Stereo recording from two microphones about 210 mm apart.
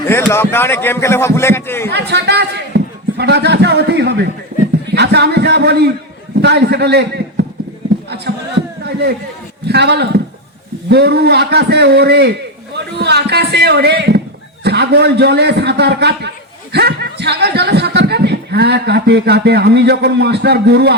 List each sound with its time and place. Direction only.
0.1 s a man's voice: 10° left (ahead or behind)
1.9 s speech: 50° right (ahead or behind)
4.5 s a sound: 45° right (ahead or behind)
4.9 s a man's voice: 50° right (ahead or behind)
9.6 s a man's voice: 50° right (ahead or behind)